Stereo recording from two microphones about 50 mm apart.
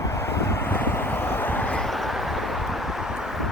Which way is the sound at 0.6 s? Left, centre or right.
Left.